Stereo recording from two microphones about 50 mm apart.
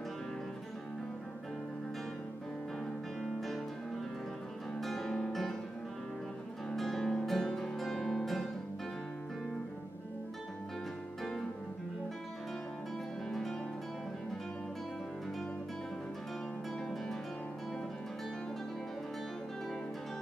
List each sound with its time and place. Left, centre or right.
3.2 s music: centre
4.7 s music: centre
6.7 s music: centre
13.3 s music: centre